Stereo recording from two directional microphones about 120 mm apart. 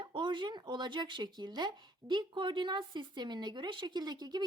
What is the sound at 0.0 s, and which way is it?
Speech, 40° right (ahead or behind).